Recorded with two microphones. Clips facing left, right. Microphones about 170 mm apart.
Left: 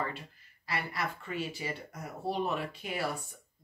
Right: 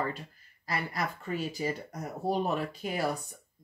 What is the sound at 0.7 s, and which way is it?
Speech, 40° right (ahead or behind).